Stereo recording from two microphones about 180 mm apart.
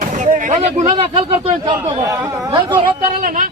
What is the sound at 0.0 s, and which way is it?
Speech, 45° right (ahead or behind).